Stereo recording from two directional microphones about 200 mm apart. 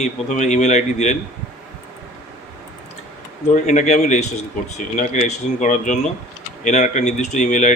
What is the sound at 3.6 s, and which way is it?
Speech, 40° left (ahead or behind).